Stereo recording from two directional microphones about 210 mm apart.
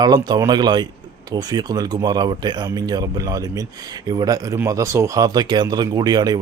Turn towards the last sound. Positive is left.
turn(degrees=-20)  # may be behind; listen again after turning